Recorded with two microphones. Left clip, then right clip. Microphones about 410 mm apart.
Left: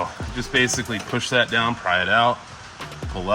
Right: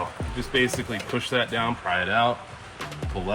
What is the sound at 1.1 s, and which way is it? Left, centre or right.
Speech, left.